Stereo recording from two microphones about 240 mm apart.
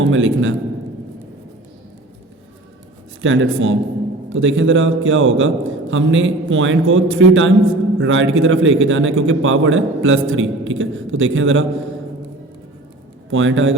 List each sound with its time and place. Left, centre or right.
0.0 s a man's voice: right
3.2 s a man's voice: right
13.3 s a man's voice: right